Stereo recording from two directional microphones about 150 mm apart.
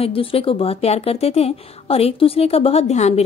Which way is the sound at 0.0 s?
40° left (ahead or behind).